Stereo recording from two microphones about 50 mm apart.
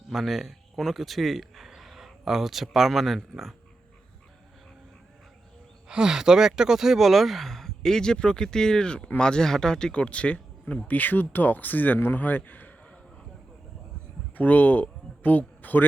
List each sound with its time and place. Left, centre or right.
0.1 s speech: centre
5.9 s a man's voice: centre; by 12.7 s left
14.3 s speech: left